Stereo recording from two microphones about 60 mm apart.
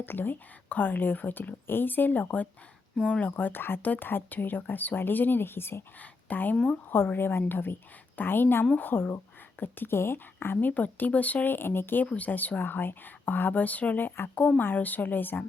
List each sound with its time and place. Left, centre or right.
0.0 s a woman's voice: left
3.2 s speech: left
6.0 s speech: left
6.9 s a woman's voice: left